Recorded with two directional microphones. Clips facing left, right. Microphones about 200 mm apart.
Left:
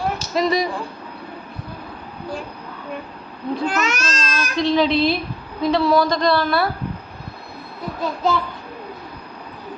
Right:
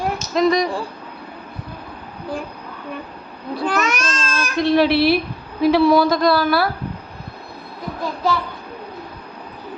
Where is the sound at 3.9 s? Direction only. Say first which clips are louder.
Right 1 dB; 55° right (ahead or behind).